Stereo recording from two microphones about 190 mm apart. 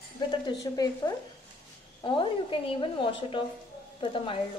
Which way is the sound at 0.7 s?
20° left (ahead or behind).